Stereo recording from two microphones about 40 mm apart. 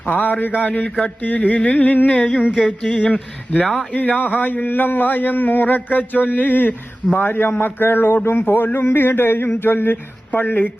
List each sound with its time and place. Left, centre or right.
0.0 s a man's voice: left
0.6 s speech: left
0.9 s speech: left
1.2 s a man's voice: left
2.1 s speech: left
3.9 s a man's voice: left